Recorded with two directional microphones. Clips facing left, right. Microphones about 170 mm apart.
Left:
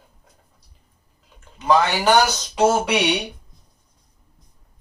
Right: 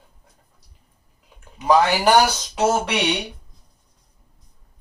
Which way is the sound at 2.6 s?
Centre (ahead or behind).